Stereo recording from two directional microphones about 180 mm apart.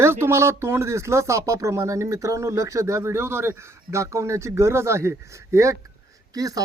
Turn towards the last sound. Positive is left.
turn(degrees=-20)  # may be behind; listen again after turning